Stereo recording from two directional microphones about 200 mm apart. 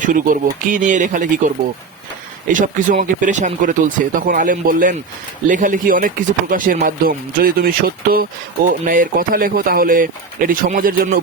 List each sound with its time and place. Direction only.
0.0 s speech: 40° right (ahead or behind)
2.5 s speech: 40° right (ahead or behind)